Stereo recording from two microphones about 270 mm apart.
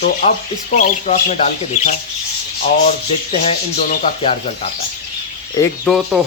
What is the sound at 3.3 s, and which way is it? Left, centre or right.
Speech, left.